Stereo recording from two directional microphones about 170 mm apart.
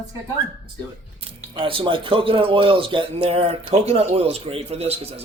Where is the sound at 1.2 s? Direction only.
30° right (ahead or behind).